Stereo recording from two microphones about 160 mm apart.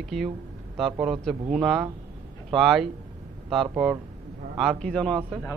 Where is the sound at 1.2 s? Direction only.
Centre (ahead or behind).